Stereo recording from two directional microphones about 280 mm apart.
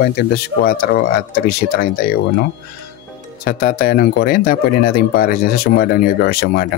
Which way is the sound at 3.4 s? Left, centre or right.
Left.